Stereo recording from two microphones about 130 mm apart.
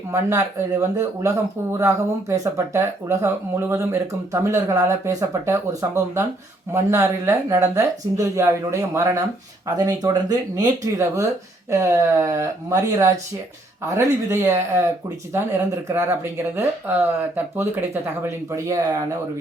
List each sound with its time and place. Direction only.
0.1 s speech: 20° right (ahead or behind)